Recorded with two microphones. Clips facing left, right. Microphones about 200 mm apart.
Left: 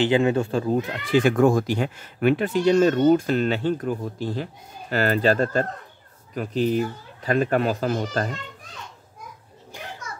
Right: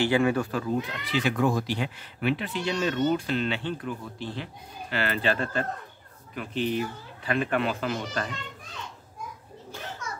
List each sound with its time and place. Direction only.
0.0 s speech: 20° left (ahead or behind)
0.7 s speech: 50° left (ahead or behind)
9.7 s children playing: 15° left (ahead or behind)